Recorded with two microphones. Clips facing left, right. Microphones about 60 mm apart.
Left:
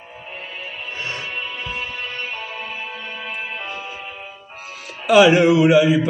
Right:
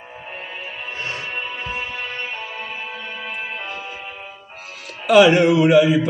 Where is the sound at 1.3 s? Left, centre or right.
Right.